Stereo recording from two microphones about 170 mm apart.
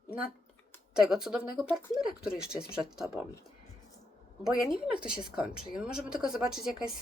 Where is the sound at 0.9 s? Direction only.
5° right (ahead or behind).